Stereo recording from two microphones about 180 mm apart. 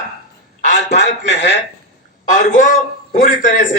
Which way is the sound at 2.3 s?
45° left (ahead or behind).